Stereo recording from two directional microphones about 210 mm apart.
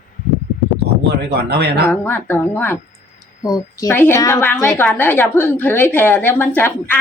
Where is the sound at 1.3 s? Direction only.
50° right (ahead or behind).